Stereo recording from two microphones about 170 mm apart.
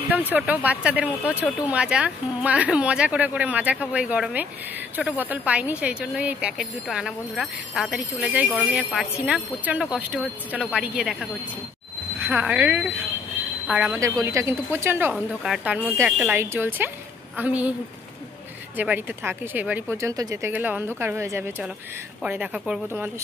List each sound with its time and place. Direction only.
0.1 s speech: 10° right (ahead or behind)
14.0 s speech: 15° right (ahead or behind)
15.1 s speech: centre (ahead or behind)
18.8 s speech: 10° right (ahead or behind)